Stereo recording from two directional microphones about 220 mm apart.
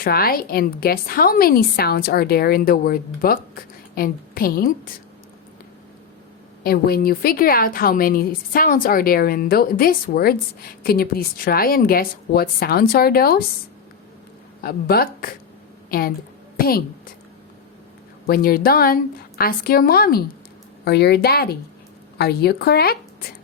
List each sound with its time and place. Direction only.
0.0 s a woman's voice: 45° left (ahead or behind)
6.6 s a woman's voice: 40° left (ahead or behind)
14.6 s a woman's voice: 45° left (ahead or behind)
18.3 s a woman's voice: 40° left (ahead or behind)